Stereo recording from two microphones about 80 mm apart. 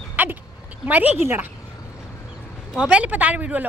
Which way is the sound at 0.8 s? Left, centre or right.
Right.